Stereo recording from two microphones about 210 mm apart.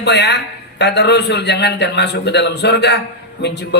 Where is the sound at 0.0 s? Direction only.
55° left (ahead or behind).